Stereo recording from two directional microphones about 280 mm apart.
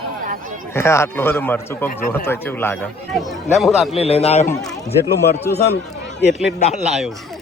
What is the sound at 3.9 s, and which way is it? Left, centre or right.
Speech, left.